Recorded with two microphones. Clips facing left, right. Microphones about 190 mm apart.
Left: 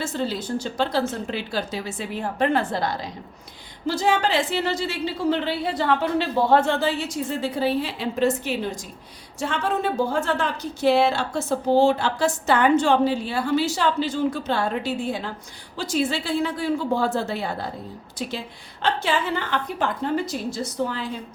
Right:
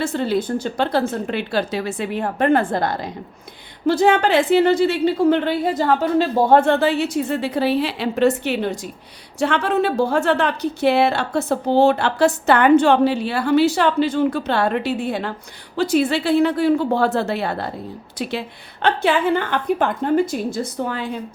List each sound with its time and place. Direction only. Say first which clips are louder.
0.0 s a woman's voice: right 6 dB; 60° right (ahead or behind)